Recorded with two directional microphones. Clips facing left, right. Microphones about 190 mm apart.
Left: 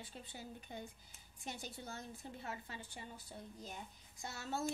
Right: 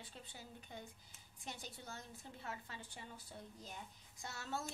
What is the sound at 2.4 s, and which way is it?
Speech, 15° left (ahead or behind).